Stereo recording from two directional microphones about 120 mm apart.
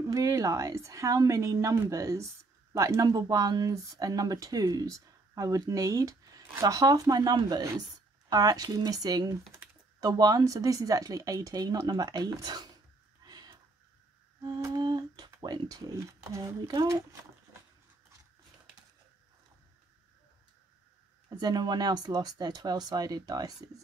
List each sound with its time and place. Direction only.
0.1 s speech: 25° right (ahead or behind)
13.2 s a sound: 35° right (ahead or behind)
14.4 s speech: 35° right (ahead or behind)
21.4 s speech: 35° right (ahead or behind)